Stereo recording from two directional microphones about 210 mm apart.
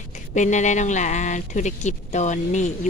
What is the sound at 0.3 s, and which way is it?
Speech, 35° left (ahead or behind).